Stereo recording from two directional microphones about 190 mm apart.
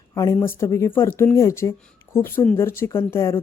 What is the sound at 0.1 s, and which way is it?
Speech, 15° left (ahead or behind).